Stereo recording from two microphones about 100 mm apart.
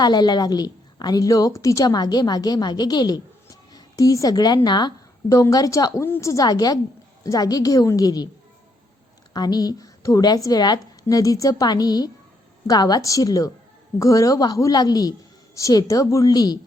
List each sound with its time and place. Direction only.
0.0 s a woman's voice: 45° left (ahead or behind)
5.3 s a woman's voice: 35° left (ahead or behind)
9.3 s a woman's voice: 45° left (ahead or behind)